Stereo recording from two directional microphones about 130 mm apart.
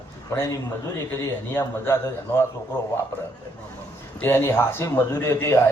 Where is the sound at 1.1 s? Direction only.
20° left (ahead or behind).